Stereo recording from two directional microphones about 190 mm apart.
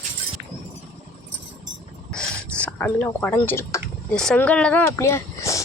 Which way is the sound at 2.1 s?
5° left (ahead or behind).